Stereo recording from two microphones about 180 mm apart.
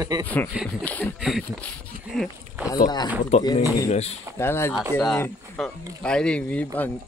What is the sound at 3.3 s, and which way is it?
Speech, 40° left (ahead or behind).